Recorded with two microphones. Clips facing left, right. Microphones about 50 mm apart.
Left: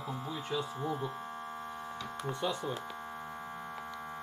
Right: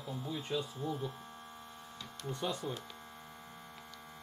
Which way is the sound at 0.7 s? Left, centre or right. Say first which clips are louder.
Left 3 dB; left.